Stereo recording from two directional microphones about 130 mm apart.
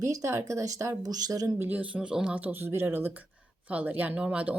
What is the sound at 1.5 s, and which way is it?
Speech, 15° right (ahead or behind).